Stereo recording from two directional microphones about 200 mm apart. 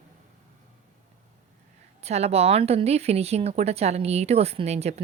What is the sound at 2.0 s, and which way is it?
A woman's voice, 30° right (ahead or behind).